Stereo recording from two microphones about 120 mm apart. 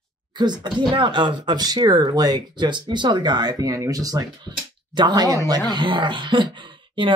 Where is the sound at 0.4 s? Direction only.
40° right (ahead or behind).